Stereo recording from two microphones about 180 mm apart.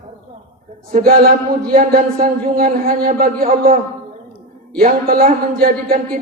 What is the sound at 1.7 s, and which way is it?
Music, 55° right (ahead or behind).